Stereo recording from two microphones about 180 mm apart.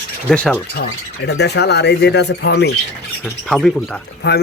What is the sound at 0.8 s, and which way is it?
Speech, 65° left (ahead or behind).